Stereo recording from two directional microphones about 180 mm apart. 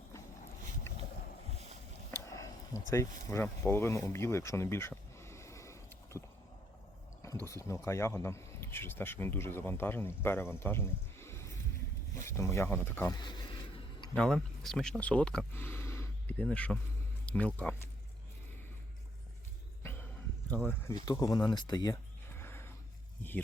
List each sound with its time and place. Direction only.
2.2 s a sound: 15° left (ahead or behind)
7.4 s speech: 15° left (ahead or behind)
14.2 s speech: centre (ahead or behind)
19.8 s a sound: 10° left (ahead or behind)
20.5 s speech: 10° left (ahead or behind)
20.9 s speech: 20° left (ahead or behind)